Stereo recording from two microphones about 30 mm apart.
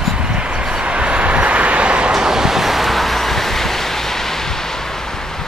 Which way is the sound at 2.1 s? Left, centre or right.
Centre.